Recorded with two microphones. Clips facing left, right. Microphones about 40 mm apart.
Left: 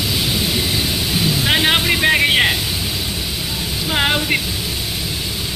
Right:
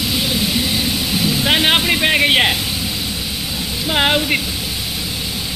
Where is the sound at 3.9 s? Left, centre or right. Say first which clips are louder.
Right 2 dB; centre.